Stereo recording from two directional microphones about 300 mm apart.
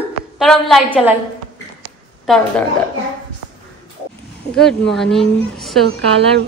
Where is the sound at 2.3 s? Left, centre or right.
Centre.